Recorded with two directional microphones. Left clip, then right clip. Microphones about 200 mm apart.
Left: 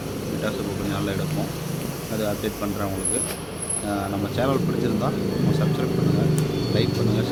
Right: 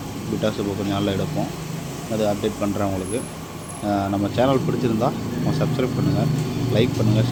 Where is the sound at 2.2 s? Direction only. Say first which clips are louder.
Right 5 dB; 15° right (ahead or behind).